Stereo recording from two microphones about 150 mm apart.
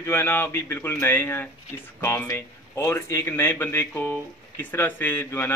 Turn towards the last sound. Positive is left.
turn(degrees=15)  # may be behind; listen again after turning